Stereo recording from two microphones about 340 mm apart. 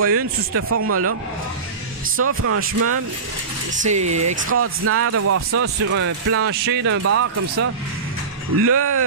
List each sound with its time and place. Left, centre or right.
0.0 s speech: right
2.1 s speech: right
3.8 s speech: right
4.4 s speech: right
6.5 s speech: right
7.0 s speech: right
8.6 s speech: right